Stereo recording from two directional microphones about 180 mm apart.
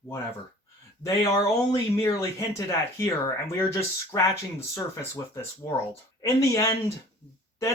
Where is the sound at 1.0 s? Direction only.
20° left (ahead or behind).